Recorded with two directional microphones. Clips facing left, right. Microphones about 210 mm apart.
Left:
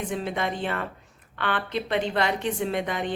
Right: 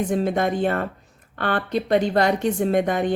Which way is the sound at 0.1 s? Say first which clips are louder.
Right 7 dB; 45° right (ahead or behind).